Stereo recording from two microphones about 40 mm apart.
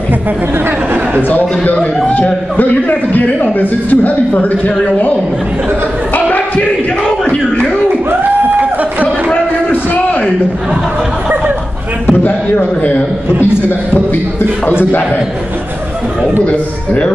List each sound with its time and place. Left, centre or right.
1.4 s a man's voice: left
8.2 s a sound: right
12.1 s a man's voice: left
14.7 s a man's voice: left
16.4 s a man's voice: left